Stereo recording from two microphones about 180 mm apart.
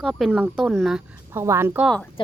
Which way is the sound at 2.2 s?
30° left (ahead or behind).